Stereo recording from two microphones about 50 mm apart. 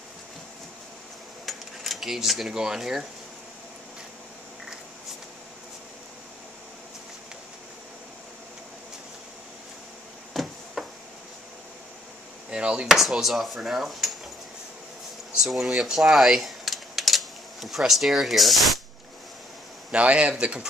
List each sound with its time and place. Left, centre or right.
1.4 s cutlery: centre
2.5 s speech: centre
10.3 s a sound: centre
12.4 s chop: centre
12.8 s speech: centre
15.4 s speech: centre
19.9 s speech: right